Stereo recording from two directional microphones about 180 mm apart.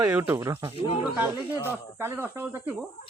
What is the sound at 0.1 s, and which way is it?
Speech, 10° right (ahead or behind).